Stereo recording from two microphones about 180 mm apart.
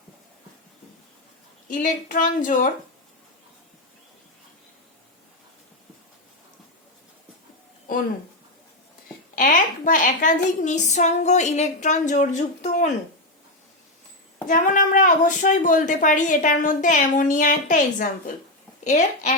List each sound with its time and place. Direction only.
1.6 s a woman's voice: 50° left (ahead or behind)
9.3 s a woman's voice: 45° left (ahead or behind)
14.4 s a woman's voice: 45° left (ahead or behind)